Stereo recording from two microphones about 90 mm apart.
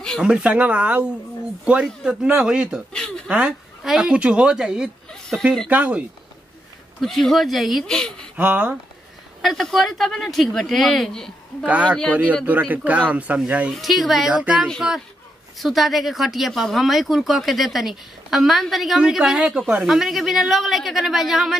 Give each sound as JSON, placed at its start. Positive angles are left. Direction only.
{"t": 0.2, "sound": "speech", "side_deg": -10}
{"t": 7.0, "sound": "speech", "side_deg": 0}
{"t": 8.4, "sound": "speech", "side_deg": -15}
{"t": 9.4, "sound": "speech", "side_deg": 0}
{"t": 11.6, "sound": "speech", "side_deg": -15}
{"t": 13.7, "sound": "speech", "side_deg": 0}
{"t": 14.3, "sound": "speech", "side_deg": -15}
{"t": 15.6, "sound": "speech", "side_deg": 0}